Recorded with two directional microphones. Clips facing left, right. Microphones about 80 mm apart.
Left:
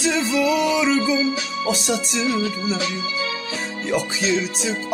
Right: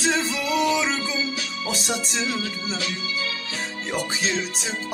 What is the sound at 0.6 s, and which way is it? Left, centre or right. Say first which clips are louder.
Music: left 4 dB; left.